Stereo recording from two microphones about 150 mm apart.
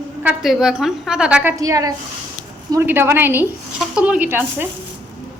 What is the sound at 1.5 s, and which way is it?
A woman's voice, 25° right (ahead or behind).